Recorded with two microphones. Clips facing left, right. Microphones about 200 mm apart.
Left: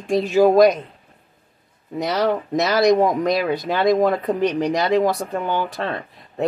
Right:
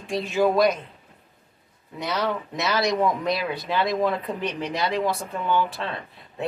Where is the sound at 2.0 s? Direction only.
40° left (ahead or behind).